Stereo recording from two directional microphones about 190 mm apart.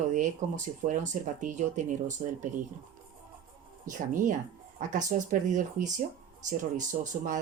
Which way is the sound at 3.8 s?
45° right (ahead or behind).